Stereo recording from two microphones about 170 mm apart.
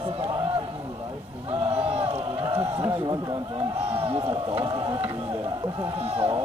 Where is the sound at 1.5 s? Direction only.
35° right (ahead or behind).